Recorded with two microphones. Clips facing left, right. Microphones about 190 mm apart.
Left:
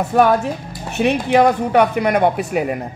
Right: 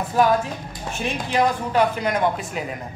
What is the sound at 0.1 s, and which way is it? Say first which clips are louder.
Speech: left 4 dB; 65° left (ahead or behind).